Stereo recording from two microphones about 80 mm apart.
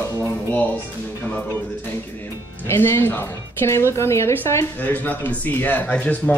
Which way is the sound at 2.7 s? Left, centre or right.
Left.